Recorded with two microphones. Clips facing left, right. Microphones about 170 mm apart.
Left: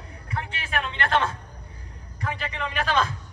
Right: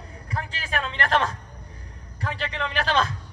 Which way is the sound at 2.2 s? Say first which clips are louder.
Right 1 dB; 35° right (ahead or behind).